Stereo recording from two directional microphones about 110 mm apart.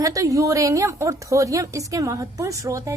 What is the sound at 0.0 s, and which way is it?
A woman's voice, 30° right (ahead or behind).